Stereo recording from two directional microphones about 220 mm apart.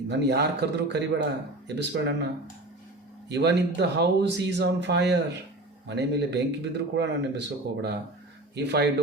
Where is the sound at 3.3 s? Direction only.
50° right (ahead or behind).